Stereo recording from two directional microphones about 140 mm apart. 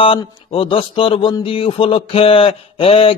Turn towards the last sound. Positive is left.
turn(degrees=40)  # may be behind; listen again after turning